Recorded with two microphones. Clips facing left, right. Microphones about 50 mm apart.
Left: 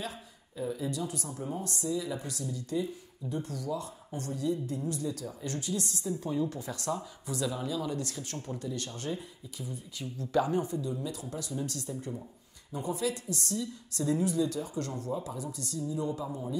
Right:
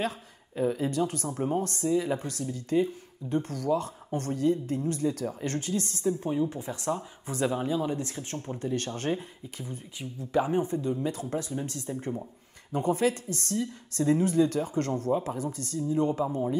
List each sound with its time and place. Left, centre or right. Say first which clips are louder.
0.0 s speech: right 8 dB; right
8.6 s speech: right 8 dB; right
9.9 s speech: right 1 dB; right
10.8 s speech: right 6 dB; right